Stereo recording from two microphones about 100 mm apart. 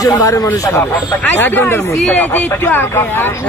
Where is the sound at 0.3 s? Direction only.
30° left (ahead or behind).